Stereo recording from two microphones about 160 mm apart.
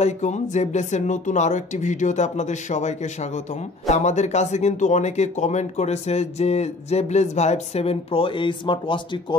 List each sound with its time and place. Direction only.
0.0 s speech: 45° left (ahead or behind); by 9.4 s 30° left (ahead or behind)